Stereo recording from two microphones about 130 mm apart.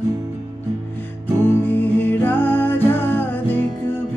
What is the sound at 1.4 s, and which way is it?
Music, 15° left (ahead or behind).